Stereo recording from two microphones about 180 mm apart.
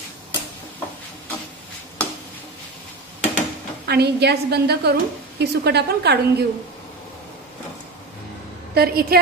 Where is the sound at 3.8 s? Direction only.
65° right (ahead or behind).